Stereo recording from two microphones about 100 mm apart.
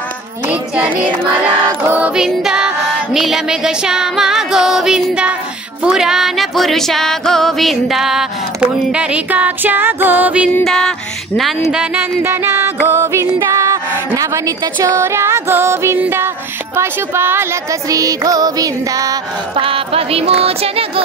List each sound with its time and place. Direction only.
0.5 s child singing: 10° right (ahead or behind)
2.2 s music: 5° right (ahead or behind)
8.9 s child singing: 10° right (ahead or behind)
10.6 s music: 5° left (ahead or behind)
12.2 s music: 20° right (ahead or behind)
12.8 s a woman's voice: 25° right (ahead or behind)
13.4 s music: 30° right (ahead or behind)
16.0 s a woman's voice: 20° right (ahead or behind)
17.8 s music: 35° right (ahead or behind)
19.5 s music: 65° right (ahead or behind)